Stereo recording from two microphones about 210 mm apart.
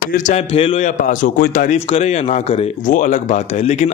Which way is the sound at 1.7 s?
25° left (ahead or behind).